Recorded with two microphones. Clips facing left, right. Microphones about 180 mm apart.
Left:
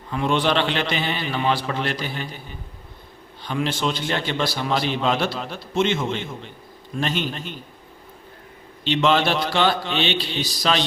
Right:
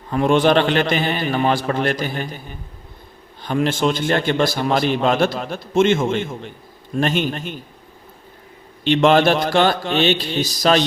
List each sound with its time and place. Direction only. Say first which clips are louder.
0.1 s a man's voice: right 6 dB; 45° right (ahead or behind)
3.4 s a man's voice: right 5 dB; 50° right (ahead or behind)
8.8 s a man's voice: right 6 dB; 50° right (ahead or behind)